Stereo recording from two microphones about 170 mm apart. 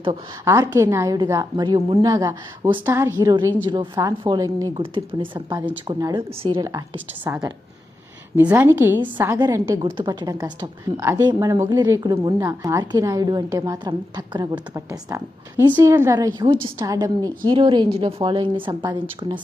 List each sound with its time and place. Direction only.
0.4 s a woman's voice: 15° right (ahead or behind)
2.8 s a woman's voice: 15° right (ahead or behind)
8.4 s a woman's voice: 10° right (ahead or behind); by 19.4 s 25° right (ahead or behind)